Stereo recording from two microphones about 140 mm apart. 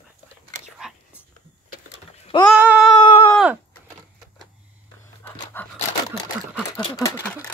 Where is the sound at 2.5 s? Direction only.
5° right (ahead or behind).